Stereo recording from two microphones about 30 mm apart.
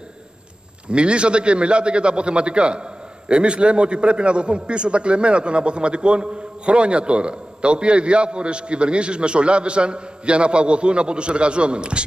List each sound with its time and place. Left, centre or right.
0.8 s a man's voice: right